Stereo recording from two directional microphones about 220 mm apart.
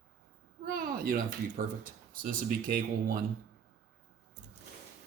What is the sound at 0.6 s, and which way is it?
Speech, 40° right (ahead or behind).